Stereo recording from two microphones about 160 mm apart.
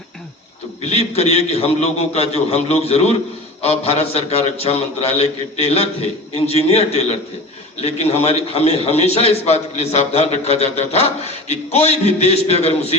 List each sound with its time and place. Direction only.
0.8 s a man's voice: 40° left (ahead or behind)